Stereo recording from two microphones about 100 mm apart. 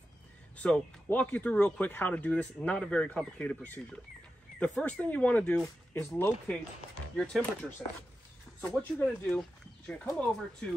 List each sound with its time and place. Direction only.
0.6 s speech: 10° left (ahead or behind)
8.5 s speech: 15° left (ahead or behind)